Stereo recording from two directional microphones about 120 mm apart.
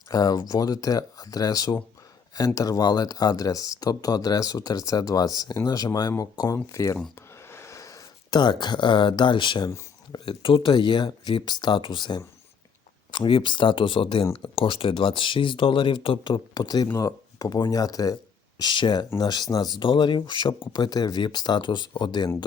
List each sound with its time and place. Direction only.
0.1 s speech: 35° left (ahead or behind)
7.2 s a sound: 20° left (ahead or behind); by 9.7 s 40° left (ahead or behind)
10.1 s speech: 45° left (ahead or behind)